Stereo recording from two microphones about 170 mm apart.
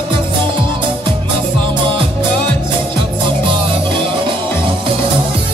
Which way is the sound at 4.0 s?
30° right (ahead or behind).